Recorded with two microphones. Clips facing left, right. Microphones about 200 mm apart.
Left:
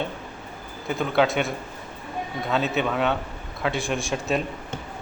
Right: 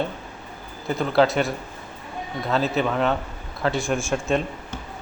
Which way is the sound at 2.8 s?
Centre (ahead or behind).